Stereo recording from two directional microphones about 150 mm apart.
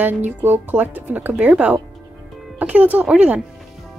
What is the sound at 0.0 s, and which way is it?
Speech, 10° right (ahead or behind).